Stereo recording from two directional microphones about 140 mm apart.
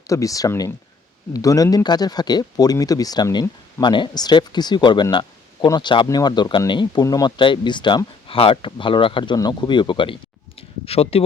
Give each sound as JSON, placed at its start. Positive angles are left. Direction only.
{"t": 0.1, "sound": "speech", "side_deg": 25}